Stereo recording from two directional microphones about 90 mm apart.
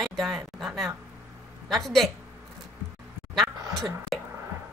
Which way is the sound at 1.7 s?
Centre (ahead or behind).